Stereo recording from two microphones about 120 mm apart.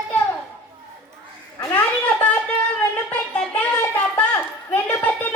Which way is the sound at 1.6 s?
15° left (ahead or behind).